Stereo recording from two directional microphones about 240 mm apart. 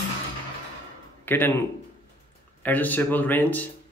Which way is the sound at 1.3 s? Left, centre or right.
Centre.